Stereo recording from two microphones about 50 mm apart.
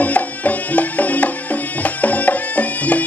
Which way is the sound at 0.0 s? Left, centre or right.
Left.